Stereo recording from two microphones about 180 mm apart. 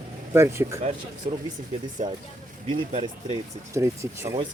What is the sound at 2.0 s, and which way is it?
Speech, 40° right (ahead or behind).